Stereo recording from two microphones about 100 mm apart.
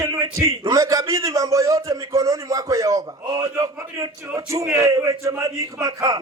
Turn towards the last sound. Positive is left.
turn(degrees=-35)  # may be behind; listen again after turning